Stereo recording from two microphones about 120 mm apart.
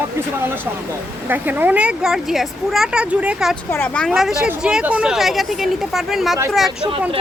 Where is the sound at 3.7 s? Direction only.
10° left (ahead or behind).